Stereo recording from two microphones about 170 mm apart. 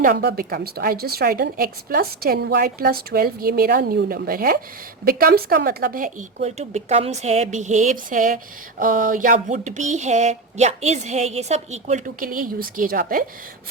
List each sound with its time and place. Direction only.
0.0 s a woman's voice: 60° right (ahead or behind); by 12.0 s 40° right (ahead or behind)
12.0 s a woman's voice: 55° right (ahead or behind)